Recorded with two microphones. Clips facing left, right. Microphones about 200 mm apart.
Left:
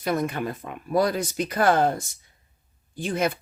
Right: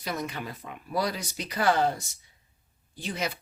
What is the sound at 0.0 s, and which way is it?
Speech, 55° left (ahead or behind).